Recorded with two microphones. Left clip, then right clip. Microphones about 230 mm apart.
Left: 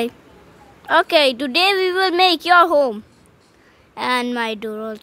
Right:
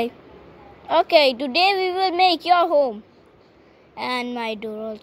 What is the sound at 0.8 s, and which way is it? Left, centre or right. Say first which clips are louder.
A woman's voice: left 1 dB; left.